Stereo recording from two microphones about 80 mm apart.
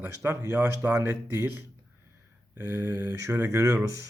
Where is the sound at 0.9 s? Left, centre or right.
Right.